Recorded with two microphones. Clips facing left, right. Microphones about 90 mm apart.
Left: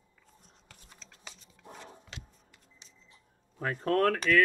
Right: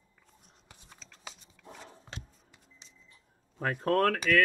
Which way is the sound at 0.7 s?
10° right (ahead or behind).